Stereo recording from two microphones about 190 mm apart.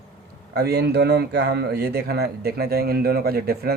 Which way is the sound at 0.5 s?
60° right (ahead or behind).